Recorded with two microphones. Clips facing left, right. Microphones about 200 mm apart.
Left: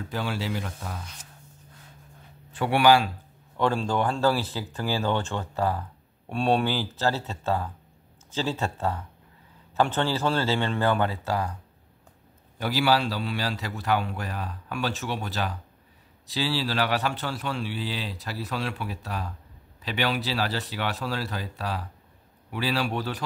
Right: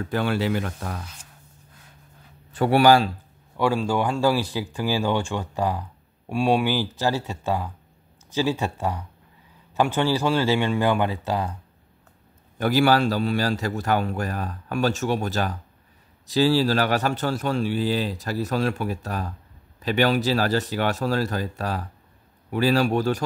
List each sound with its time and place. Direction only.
0.0 s speech: 60° right (ahead or behind)
2.5 s speech: 40° right (ahead or behind)
3.5 s speech: 10° right (ahead or behind)
12.5 s a man's voice: 50° right (ahead or behind)